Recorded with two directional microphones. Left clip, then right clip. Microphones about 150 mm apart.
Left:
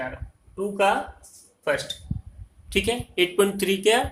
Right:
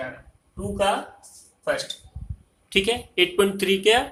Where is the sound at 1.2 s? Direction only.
40° left (ahead or behind).